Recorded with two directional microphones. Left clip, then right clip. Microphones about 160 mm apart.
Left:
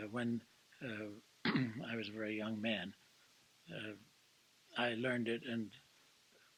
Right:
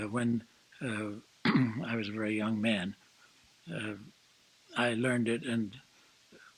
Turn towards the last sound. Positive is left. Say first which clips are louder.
# right 8 dB
turn(degrees=30)  # may be behind; listen again after turning